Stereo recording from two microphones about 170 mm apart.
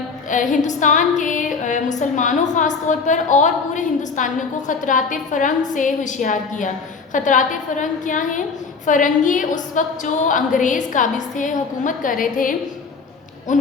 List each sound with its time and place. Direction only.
0.3 s a woman's voice: 50° left (ahead or behind)